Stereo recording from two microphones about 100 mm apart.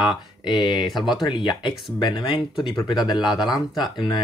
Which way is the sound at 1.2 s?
45° left (ahead or behind).